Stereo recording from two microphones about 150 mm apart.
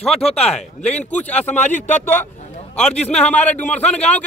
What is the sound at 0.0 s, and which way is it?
Speech, centre (ahead or behind).